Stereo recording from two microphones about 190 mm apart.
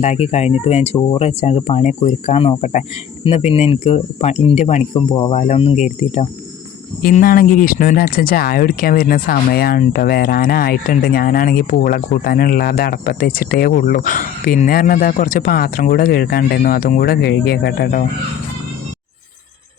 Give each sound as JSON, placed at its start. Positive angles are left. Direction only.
{"t": 0.0, "sound": "speech", "side_deg": 35}
{"t": 7.0, "sound": "speech", "side_deg": 50}